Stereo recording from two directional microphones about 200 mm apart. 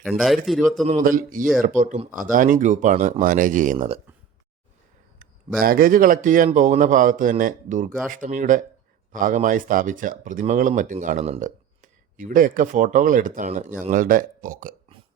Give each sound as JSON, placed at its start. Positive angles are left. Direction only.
{"t": 0.0, "sound": "a man's voice", "side_deg": 0}
{"t": 0.9, "sound": "speech", "side_deg": -40}
{"t": 3.8, "sound": "speech", "side_deg": -30}
{"t": 5.5, "sound": "speech", "side_deg": -45}